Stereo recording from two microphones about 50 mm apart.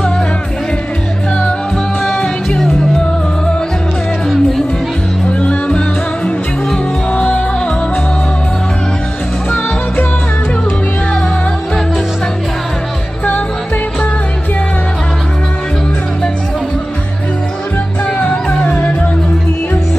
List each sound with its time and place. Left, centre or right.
2.1 s music: centre
4.3 s music: centre
5.2 s music: left
7.1 s music: left
18.5 s music: left